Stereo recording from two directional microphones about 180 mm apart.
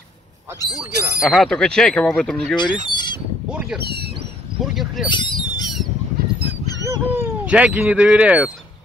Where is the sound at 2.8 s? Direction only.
25° left (ahead or behind).